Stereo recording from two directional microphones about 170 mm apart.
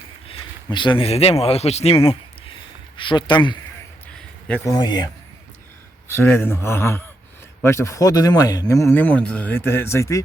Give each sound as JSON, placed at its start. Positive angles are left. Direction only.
{"t": 0.3, "sound": "speech", "side_deg": 30}
{"t": 4.6, "sound": "speech", "side_deg": 20}
{"t": 6.1, "sound": "speech", "side_deg": 15}